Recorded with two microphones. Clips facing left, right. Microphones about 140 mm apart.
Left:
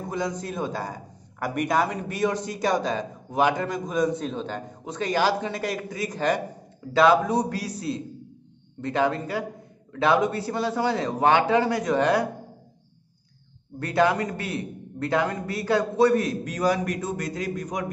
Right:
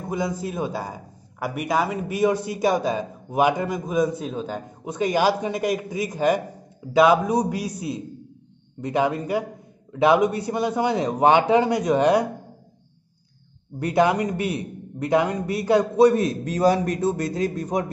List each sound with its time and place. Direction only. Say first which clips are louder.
0.1 s a man's voice: right 3 dB; 10° right (ahead or behind)
13.7 s a man's voice: right 2 dB; 15° right (ahead or behind)